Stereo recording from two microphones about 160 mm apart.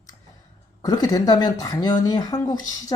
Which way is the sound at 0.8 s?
25° left (ahead or behind).